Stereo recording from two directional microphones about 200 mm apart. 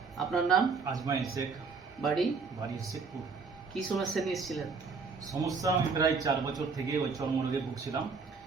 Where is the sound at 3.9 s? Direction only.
Centre (ahead or behind).